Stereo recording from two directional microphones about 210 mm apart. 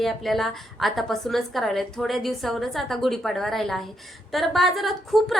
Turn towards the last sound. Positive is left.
turn(degrees=0)  # may be behind; listen again after turning